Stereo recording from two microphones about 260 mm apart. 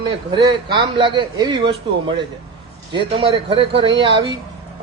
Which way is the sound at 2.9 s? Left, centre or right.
Centre.